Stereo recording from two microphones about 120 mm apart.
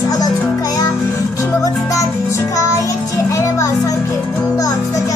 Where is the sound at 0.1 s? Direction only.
30° left (ahead or behind).